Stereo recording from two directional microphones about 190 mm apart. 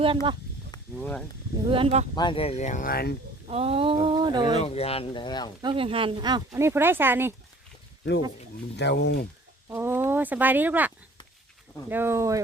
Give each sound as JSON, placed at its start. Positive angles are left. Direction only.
{"t": 0.0, "sound": "speech", "side_deg": -25}
{"t": 0.9, "sound": "speech", "side_deg": 5}
{"t": 1.7, "sound": "speech", "side_deg": -30}
{"t": 2.1, "sound": "speech", "side_deg": 25}
{"t": 3.4, "sound": "speech", "side_deg": -30}
{"t": 4.6, "sound": "speech", "side_deg": 35}
{"t": 5.6, "sound": "speech", "side_deg": -30}
{"t": 8.7, "sound": "speech", "side_deg": 60}
{"t": 9.6, "sound": "speech", "side_deg": -10}